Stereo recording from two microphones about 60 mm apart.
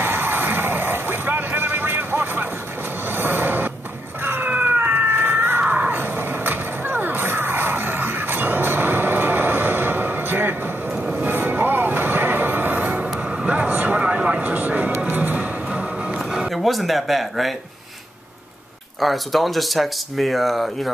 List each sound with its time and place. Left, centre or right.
0.0 s vehicle: right
4.2 s cat: right
5.6 s a sound: right
11.1 s music: right
13.2 s vehicle: centre
14.0 s vehicle: centre
14.4 s a sound: right
15.0 s music: right
16.2 s a sound: centre
18.9 s speech: centre